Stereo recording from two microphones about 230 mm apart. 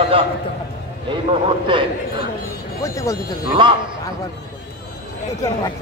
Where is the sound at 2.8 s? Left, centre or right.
Centre.